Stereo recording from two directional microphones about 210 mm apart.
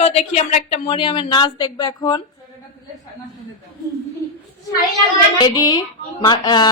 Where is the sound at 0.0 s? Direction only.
30° left (ahead or behind).